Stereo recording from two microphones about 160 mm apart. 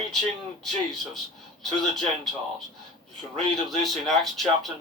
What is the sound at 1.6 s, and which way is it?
Speech, centre (ahead or behind).